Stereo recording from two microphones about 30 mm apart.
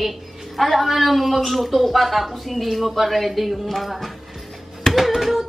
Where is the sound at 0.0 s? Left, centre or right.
Centre.